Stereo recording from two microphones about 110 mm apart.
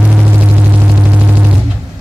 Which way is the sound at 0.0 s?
15° right (ahead or behind).